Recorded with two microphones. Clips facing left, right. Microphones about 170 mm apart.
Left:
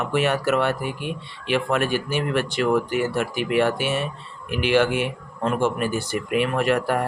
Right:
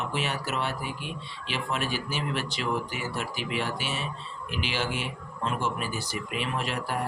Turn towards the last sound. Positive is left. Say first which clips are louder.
# left 10 dB
turn(degrees=60)  # may be behind; listen again after turning